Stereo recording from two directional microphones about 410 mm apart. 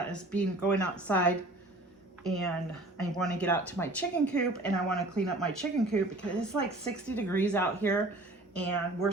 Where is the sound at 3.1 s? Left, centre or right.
Centre.